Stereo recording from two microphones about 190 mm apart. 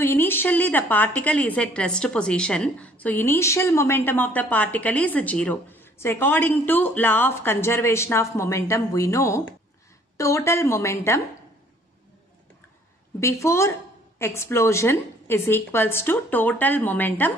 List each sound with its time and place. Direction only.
0.0 s a woman's voice: 10° left (ahead or behind)
13.2 s a woman's voice: 15° left (ahead or behind)